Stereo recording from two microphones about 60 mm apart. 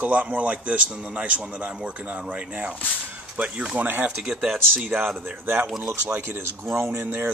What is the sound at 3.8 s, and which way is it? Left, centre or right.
Speech, right.